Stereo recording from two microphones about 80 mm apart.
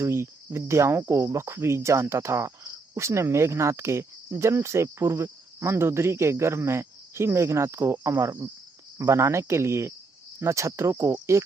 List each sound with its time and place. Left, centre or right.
0.0 s cricket: right